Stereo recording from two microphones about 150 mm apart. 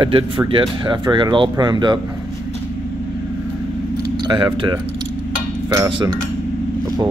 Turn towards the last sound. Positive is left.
turn(degrees=-35)  # may be behind; listen again after turning